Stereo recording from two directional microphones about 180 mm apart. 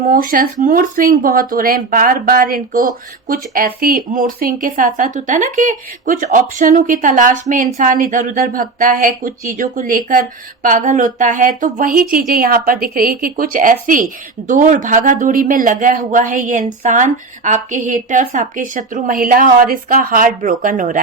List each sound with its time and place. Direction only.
0.1 s speech: 50° right (ahead or behind)